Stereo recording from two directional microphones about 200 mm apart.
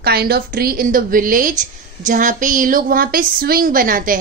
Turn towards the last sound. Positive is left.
turn(degrees=-45)  # may be behind; listen again after turning